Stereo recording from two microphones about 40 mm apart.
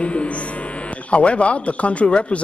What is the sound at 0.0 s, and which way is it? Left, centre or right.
Mains hum, left.